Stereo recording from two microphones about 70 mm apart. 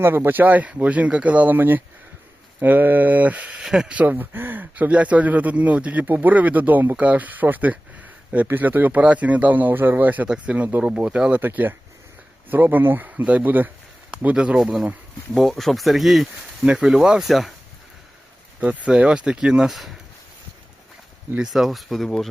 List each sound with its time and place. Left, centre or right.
0.0 s speech: right
3.6 s speech: centre
3.9 s speech: right
14.3 s speech: centre
15.4 s speech: centre
18.6 s speech: centre
21.3 s speech: centre